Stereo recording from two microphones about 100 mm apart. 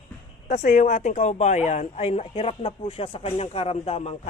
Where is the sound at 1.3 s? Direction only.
90° left.